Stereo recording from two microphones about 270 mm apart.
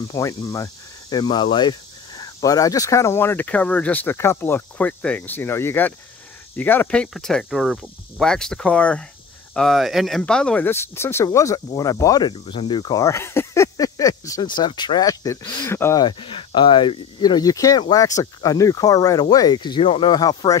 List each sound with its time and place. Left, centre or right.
0.1 s speech: centre